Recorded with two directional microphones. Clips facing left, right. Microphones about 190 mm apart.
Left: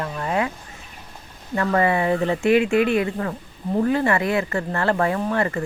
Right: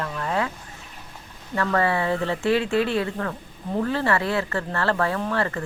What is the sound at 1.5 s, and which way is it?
Speech, 20° left (ahead or behind).